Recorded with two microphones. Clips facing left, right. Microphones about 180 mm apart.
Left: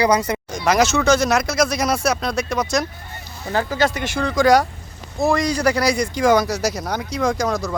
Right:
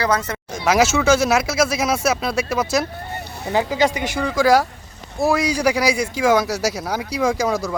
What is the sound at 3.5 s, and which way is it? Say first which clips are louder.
Speech: right 1 dB; 15° right (ahead or behind).